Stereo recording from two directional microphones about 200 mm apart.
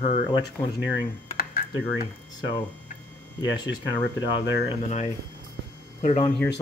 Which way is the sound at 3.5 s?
20° left (ahead or behind).